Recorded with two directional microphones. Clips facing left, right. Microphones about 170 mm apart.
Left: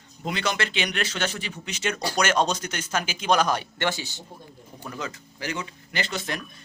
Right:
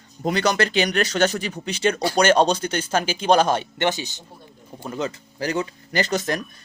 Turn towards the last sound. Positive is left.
turn(degrees=-40)  # may be behind; listen again after turning